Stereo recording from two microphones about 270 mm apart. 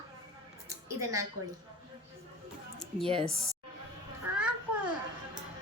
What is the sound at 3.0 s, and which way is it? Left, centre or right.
Speech, right.